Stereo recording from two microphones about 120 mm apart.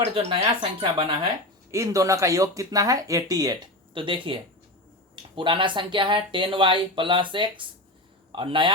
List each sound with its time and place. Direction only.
0.0 s speech: 55° right (ahead or behind)
1.7 s speech: 25° right (ahead or behind)
3.9 s speech: 45° right (ahead or behind)